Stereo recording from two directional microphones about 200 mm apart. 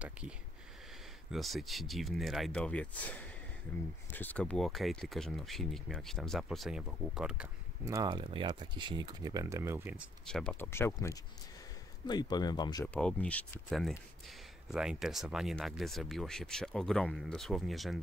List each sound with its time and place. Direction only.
1.3 s speech: centre (ahead or behind)
7.8 s speech: 20° right (ahead or behind)
10.2 s speech: 5° left (ahead or behind); by 12.8 s 20° left (ahead or behind)
12.8 s speech: 5° left (ahead or behind)